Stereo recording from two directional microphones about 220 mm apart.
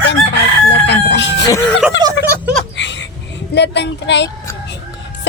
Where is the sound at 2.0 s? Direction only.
10° right (ahead or behind).